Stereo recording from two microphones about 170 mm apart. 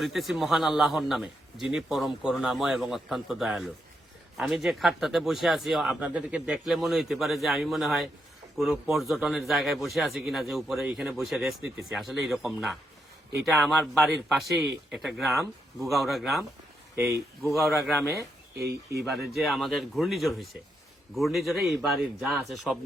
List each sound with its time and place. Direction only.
0.0 s a man's voice: centre (ahead or behind)
17.1 s speech: 15° right (ahead or behind)
17.5 s a man's voice: centre (ahead or behind)
18.5 s speech: 70° right (ahead or behind)
19.3 s a man's voice: centre (ahead or behind)